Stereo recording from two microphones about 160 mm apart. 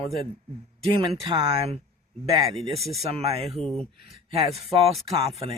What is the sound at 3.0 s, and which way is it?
Speech, 40° right (ahead or behind).